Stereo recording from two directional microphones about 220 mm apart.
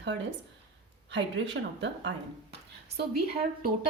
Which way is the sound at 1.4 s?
55° right (ahead or behind).